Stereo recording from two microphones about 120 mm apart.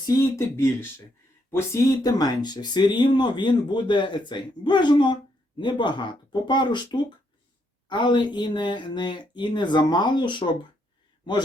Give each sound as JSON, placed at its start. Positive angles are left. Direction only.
{"t": 0.0, "sound": "speech", "side_deg": 30}
{"t": 0.5, "sound": "speech", "side_deg": 20}